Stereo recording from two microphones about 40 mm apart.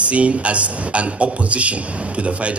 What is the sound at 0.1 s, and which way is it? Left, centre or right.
Speech, right.